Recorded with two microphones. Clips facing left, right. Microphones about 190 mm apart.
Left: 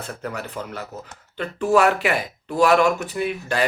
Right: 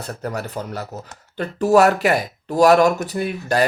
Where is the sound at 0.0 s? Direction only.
40° right (ahead or behind).